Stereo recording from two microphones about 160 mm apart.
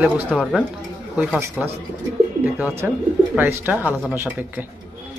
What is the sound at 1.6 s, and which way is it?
Speech, 5° right (ahead or behind).